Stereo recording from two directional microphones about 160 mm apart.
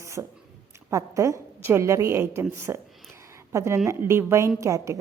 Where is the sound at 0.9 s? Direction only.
20° right (ahead or behind).